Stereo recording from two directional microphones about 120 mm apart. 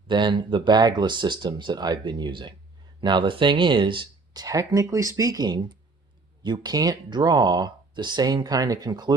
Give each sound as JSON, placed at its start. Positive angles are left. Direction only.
{"t": 0.1, "sound": "speech", "side_deg": -40}